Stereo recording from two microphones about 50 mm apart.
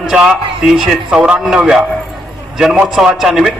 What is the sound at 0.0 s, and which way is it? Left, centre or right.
A man's voice, centre.